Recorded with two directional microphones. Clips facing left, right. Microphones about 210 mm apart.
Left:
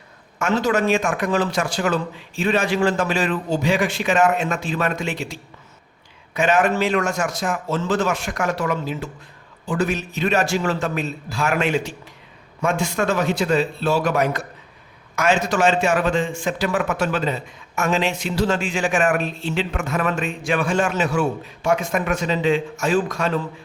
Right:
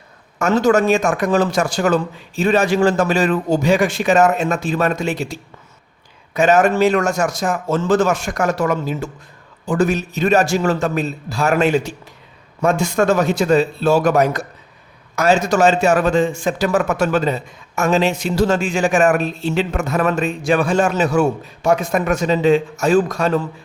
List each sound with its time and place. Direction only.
0.3 s a man's voice: 45° right (ahead or behind)